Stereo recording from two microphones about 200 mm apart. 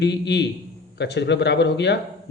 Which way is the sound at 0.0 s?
60° left (ahead or behind).